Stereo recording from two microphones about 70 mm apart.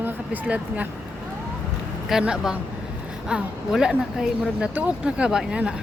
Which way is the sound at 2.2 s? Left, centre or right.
Centre.